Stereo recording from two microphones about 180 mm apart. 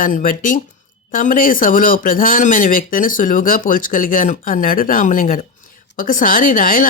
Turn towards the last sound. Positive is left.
turn(degrees=50)  # may be behind; listen again after turning